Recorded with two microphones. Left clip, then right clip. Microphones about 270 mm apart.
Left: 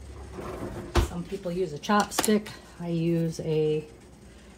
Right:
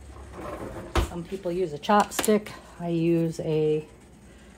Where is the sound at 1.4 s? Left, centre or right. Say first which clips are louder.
Right 3 dB; right.